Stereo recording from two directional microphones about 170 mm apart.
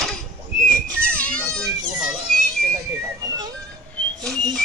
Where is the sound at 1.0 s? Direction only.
5° left (ahead or behind).